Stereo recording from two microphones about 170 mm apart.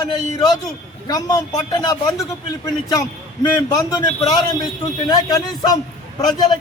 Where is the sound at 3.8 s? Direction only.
20° left (ahead or behind).